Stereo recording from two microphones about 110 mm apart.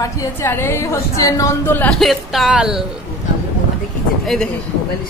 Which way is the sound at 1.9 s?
Centre (ahead or behind).